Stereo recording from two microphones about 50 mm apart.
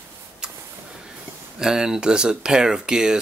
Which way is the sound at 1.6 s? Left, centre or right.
Centre.